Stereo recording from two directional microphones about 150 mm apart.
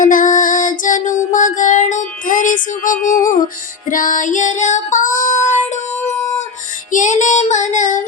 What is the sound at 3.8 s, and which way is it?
Female singing, 65° left (ahead or behind).